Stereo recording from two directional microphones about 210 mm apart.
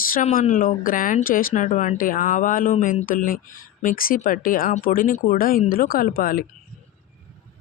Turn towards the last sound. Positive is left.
turn(degrees=45)  # may be behind; listen again after turning